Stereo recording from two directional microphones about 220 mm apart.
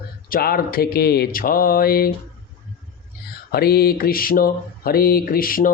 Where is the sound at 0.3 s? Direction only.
40° left (ahead or behind).